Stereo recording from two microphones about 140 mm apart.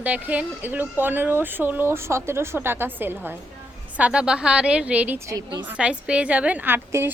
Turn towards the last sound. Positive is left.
turn(degrees=-15)  # may be behind; listen again after turning